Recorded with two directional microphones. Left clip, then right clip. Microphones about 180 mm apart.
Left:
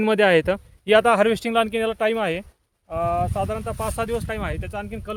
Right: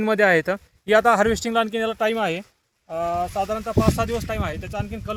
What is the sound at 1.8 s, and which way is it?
Speech, 20° left (ahead or behind).